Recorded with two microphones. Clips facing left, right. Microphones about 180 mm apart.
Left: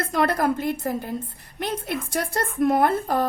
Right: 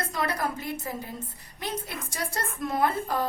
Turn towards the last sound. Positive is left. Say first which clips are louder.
# left 6 dB
turn(degrees=55)  # may be behind; listen again after turning